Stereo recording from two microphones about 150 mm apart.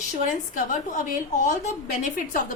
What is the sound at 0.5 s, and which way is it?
A woman's voice, 60° left (ahead or behind).